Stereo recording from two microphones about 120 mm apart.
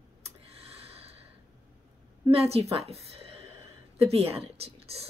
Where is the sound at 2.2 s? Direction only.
55° right (ahead or behind).